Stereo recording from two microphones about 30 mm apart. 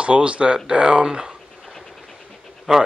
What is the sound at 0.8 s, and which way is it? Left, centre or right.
Speech, right.